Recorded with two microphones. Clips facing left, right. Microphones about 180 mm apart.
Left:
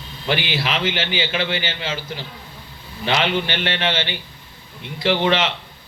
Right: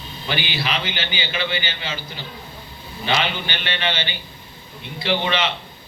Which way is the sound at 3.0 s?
80° left.